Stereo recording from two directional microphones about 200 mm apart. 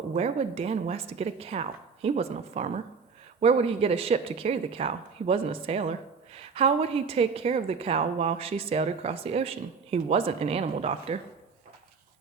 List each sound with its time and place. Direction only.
0.2 s a woman's voice: 30° right (ahead or behind)